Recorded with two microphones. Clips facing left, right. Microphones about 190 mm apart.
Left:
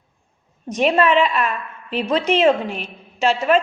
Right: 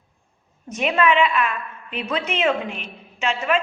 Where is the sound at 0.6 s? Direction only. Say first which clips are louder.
Left 4 dB; 35° left (ahead or behind).